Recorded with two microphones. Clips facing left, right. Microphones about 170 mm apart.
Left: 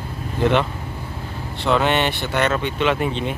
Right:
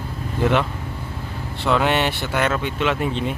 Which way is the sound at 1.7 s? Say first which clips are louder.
Left 1 dB; 5° right (ahead or behind).